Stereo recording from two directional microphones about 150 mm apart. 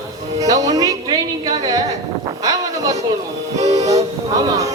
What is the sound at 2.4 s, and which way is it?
Wind noise, 25° right (ahead or behind).